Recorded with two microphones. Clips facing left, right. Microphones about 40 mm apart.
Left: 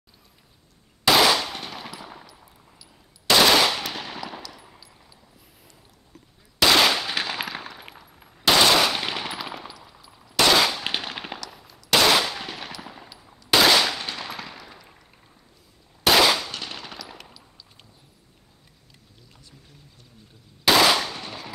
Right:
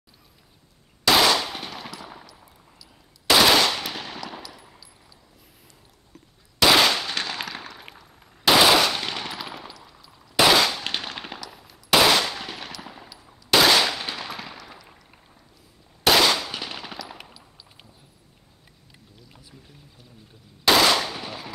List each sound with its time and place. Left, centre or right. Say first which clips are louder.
1.0 s machine gun: left 1 dB; centre
6.1 s machine gun: left 1 dB; centre
11.3 s machine gun: even; centre
13.2 s a sound: even; centre
16.0 s machine gun: left 1 dB; centre
19.3 s boat: right 1 dB; centre
20.6 s machine gun: even; centre